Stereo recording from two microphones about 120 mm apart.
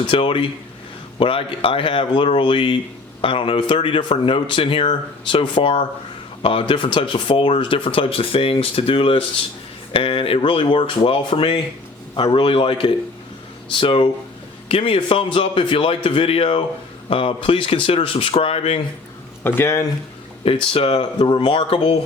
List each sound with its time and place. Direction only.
0.0 s speech: 45° left (ahead or behind)
19.4 s speech: 20° left (ahead or behind)
20.7 s speech: 50° left (ahead or behind)